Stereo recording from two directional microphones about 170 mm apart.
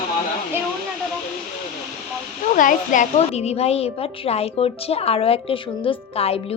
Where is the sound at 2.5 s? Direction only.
50° left (ahead or behind); by 6.3 s 35° left (ahead or behind).